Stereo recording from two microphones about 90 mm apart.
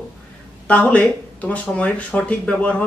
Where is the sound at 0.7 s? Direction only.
15° left (ahead or behind).